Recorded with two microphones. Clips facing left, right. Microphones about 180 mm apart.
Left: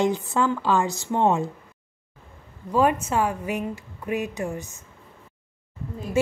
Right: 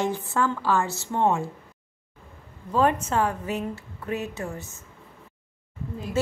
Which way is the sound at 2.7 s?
10° left (ahead or behind).